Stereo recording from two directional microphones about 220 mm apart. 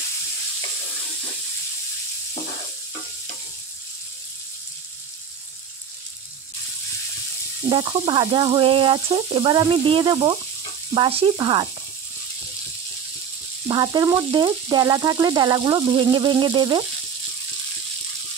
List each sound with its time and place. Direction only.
7.6 s speech: 25° right (ahead or behind)
13.7 s speech: 20° right (ahead or behind)